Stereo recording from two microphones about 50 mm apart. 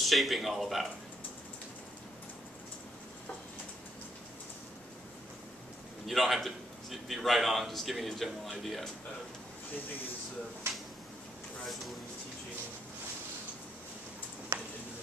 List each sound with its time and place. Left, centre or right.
0.0 s a man's voice: centre
6.0 s a man's voice: centre
14.5 s a sound: right